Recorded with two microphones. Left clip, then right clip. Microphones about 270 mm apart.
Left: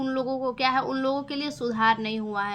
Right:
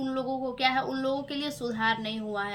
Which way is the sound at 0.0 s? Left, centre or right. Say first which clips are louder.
Left 4 dB; centre.